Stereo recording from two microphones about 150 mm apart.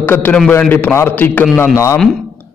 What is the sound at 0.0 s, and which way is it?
A man's voice, 10° left (ahead or behind).